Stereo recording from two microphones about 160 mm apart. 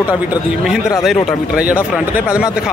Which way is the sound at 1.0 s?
Centre (ahead or behind).